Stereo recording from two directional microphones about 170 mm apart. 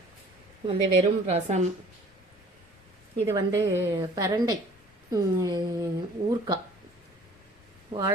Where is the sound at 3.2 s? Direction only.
20° right (ahead or behind).